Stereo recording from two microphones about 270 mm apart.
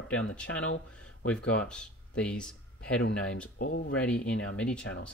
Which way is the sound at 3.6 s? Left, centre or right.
Left.